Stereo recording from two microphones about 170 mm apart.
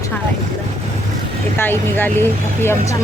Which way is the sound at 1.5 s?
15° left (ahead or behind).